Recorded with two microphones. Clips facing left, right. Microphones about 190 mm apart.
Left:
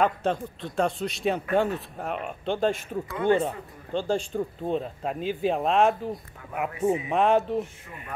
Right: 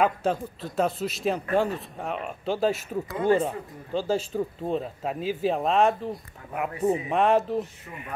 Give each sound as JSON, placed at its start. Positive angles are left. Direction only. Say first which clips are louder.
{"t": 0.0, "sound": "a man's voice", "louder": "right 1 dB", "side_deg": -5}
{"t": 3.1, "sound": "speech", "louder": "even", "side_deg": -35}
{"t": 3.3, "sound": "a man's voice", "louder": "right 1 dB", "side_deg": -5}